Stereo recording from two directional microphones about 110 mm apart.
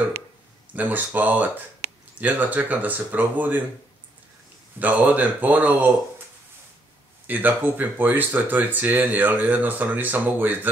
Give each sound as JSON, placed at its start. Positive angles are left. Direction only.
{"t": 0.7, "sound": "speech", "side_deg": -15}
{"t": 4.7, "sound": "speech", "side_deg": -15}
{"t": 7.2, "sound": "speech", "side_deg": -15}